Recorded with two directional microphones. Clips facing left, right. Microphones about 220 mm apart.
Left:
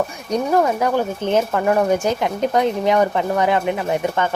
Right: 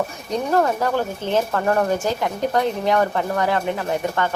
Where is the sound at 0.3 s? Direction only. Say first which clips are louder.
Left 2 dB; 15° left (ahead or behind).